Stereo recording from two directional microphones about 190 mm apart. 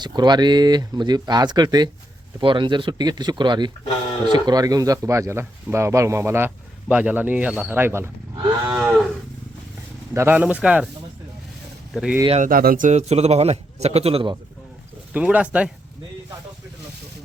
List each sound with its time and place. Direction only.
0.0 s speech: 20° right (ahead or behind)
8.4 s speech: 20° right (ahead or behind)
8.7 s speech: 5° right (ahead or behind)
10.2 s speech: 10° right (ahead or behind)
11.9 s speech: 5° right (ahead or behind)
12.4 s a man's voice: 50° right (ahead or behind); by 14.3 s 30° right (ahead or behind)
15.1 s speech: 5° right (ahead or behind)